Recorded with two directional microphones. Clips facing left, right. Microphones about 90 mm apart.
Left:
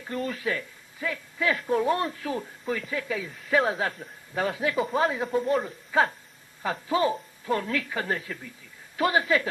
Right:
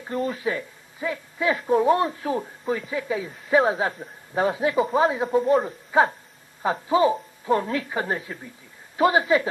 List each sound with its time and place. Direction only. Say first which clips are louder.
0.0 s speech: right 4 dB; 35° right (ahead or behind)
0.4 s speech: right 3 dB; 20° right (ahead or behind)
4.7 s speech: right 4 dB; centre (ahead or behind)
5.1 s chopping: right 5 dB; 35° right (ahead or behind)
5.9 s a sound: right 4 dB; 25° right (ahead or behind)
6.6 s speech: right 5 dB; 25° right (ahead or behind)